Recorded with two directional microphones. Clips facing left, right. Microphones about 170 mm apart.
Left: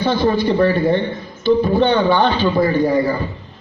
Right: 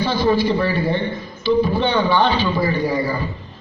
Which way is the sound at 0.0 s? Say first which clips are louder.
Left 1 dB; 50° left (ahead or behind).